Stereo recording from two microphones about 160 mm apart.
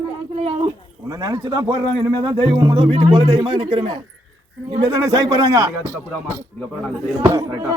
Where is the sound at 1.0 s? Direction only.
20° right (ahead or behind).